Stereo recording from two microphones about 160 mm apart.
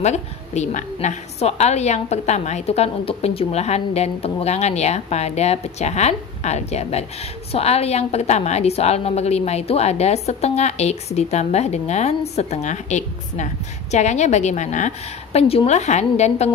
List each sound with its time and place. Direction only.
0.0 s a woman's voice: 45° left (ahead or behind)